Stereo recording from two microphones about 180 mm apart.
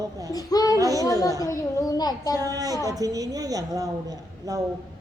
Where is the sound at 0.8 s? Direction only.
20° right (ahead or behind).